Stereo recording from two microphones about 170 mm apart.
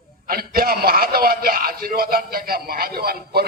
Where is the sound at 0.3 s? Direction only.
60° right (ahead or behind).